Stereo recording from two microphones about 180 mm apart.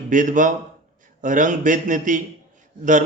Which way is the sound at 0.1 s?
45° right (ahead or behind).